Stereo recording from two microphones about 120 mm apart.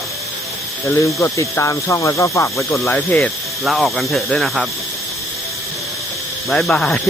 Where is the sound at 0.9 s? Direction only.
25° left (ahead or behind).